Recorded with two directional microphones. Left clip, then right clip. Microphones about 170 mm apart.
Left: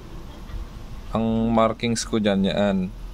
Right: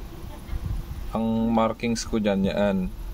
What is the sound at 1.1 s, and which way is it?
Speech, 20° left (ahead or behind).